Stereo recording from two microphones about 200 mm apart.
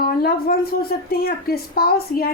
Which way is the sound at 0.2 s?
50° left (ahead or behind).